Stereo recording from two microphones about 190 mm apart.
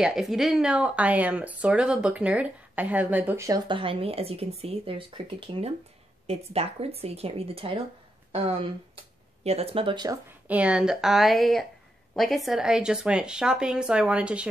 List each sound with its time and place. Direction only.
0.0 s speech: centre (ahead or behind); by 10.1 s 25° right (ahead or behind)
10.5 s speech: 5° right (ahead or behind)